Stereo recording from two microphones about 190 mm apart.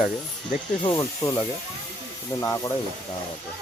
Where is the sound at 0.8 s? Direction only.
15° left (ahead or behind).